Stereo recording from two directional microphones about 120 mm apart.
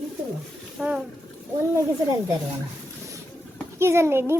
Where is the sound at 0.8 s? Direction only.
10° right (ahead or behind).